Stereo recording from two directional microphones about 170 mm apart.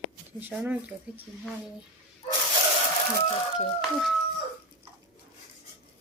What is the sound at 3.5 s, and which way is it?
Speech, centre (ahead or behind).